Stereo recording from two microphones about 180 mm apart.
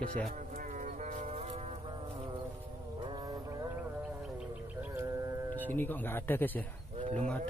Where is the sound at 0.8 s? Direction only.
45° right (ahead or behind).